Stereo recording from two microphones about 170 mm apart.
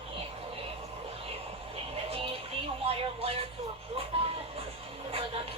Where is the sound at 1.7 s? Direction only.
35° right (ahead or behind).